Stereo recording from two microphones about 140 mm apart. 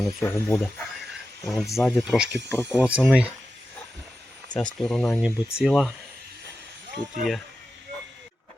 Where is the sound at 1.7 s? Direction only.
Centre (ahead or behind).